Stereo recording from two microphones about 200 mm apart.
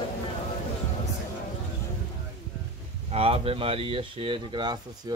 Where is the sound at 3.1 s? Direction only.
30° right (ahead or behind).